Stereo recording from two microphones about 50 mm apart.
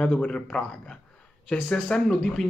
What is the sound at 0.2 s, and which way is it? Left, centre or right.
Speech, left.